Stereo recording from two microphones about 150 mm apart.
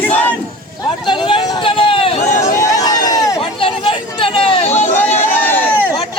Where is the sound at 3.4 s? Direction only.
35° left (ahead or behind).